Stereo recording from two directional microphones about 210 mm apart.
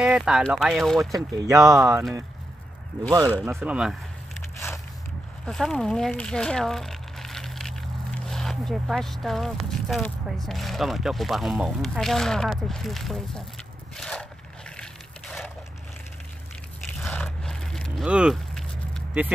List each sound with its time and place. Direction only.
0.0 s speech: 5° right (ahead or behind)
1.1 s speech: 15° right (ahead or behind)
3.4 s speech: 5° right (ahead or behind)
5.4 s speech: 5° left (ahead or behind)
13.9 s a sound: 5° left (ahead or behind)
17.0 s a sound: 5° left (ahead or behind)